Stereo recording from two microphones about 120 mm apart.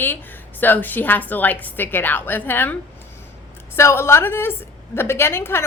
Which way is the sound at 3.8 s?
20° left (ahead or behind).